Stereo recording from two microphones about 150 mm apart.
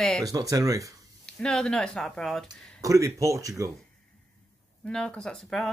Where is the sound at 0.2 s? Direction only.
25° right (ahead or behind).